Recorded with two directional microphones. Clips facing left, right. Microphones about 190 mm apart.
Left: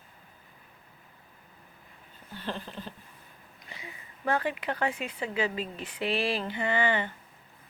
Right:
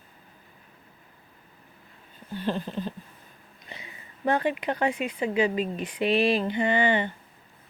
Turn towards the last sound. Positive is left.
turn(degrees=-20)  # may be behind; listen again after turning